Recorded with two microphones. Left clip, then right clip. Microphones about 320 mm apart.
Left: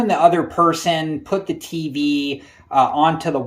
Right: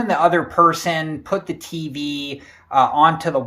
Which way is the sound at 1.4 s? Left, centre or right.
Centre.